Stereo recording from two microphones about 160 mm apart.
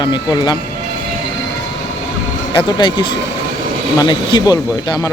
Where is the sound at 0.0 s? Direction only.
25° left (ahead or behind).